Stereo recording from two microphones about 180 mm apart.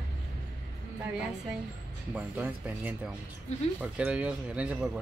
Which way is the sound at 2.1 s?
10° right (ahead or behind).